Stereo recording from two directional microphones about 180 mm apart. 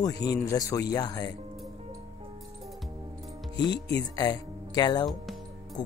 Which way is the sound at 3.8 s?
20° left (ahead or behind).